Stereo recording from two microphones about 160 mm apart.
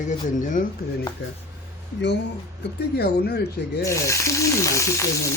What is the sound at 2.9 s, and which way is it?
Speech, 80° left.